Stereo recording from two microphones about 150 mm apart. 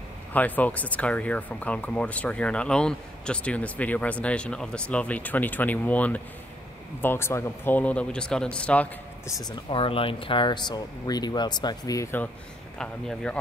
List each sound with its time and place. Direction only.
0.3 s speech: 10° left (ahead or behind)
9.7 s speech: 35° left (ahead or behind); by 12.3 s 15° left (ahead or behind)
12.7 s speech: 5° left (ahead or behind)